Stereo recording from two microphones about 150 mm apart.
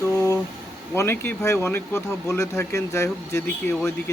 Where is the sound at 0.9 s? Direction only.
15° left (ahead or behind).